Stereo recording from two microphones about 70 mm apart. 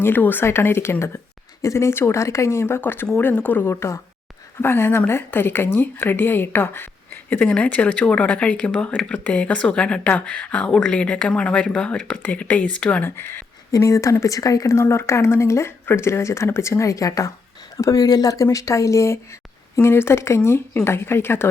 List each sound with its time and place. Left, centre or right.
0.0 s a woman's voice: left
13.1 s speech: left
13.7 s speech: left
18.5 s speech: left